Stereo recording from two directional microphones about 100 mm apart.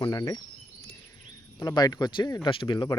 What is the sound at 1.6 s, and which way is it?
Speech, 40° left (ahead or behind).